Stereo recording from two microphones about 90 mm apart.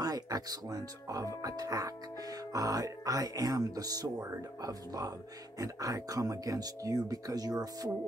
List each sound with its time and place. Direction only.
0.0 s speech: 45° right (ahead or behind)